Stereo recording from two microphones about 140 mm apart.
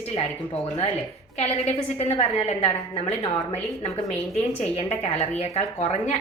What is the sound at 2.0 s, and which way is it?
A woman's voice, 50° left (ahead or behind).